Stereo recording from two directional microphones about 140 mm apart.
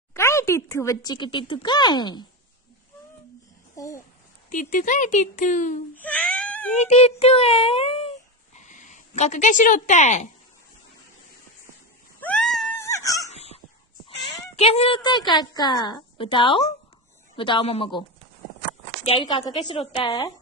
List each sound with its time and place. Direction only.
0.1 s speech: 20° left (ahead or behind)
3.7 s a child's voice: 25° left (ahead or behind)
4.5 s speech: 70° left (ahead or behind)
5.9 s a sound: 10° left (ahead or behind)
6.8 s child singing: 50° left (ahead or behind)
8.5 s speech: 60° left (ahead or behind)
12.2 s cat: 10° left (ahead or behind)
12.7 s dog: 20° left (ahead or behind)
13.3 s a sound: 50° left (ahead or behind)
14.0 s speech: 40° left (ahead or behind)
19.0 s speech: 40° left (ahead or behind)
19.5 s child singing: 45° left (ahead or behind)
20.1 s a woman's voice: 25° left (ahead or behind)